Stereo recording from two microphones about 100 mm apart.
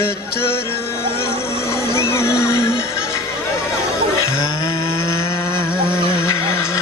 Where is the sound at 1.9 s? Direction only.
25° left (ahead or behind).